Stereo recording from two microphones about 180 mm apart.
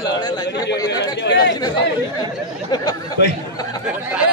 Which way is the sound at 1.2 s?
75° left (ahead or behind).